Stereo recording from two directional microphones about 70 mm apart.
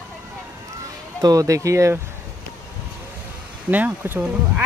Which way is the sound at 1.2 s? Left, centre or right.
Right.